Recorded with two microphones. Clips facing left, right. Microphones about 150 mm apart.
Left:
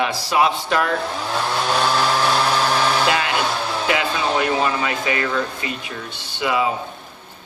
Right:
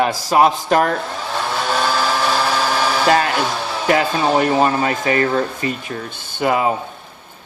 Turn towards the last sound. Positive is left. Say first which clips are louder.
# right 3 dB
turn(degrees=-50)  # may be behind; listen again after turning